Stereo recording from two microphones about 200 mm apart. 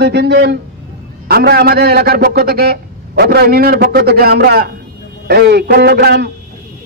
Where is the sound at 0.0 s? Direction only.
55° right (ahead or behind).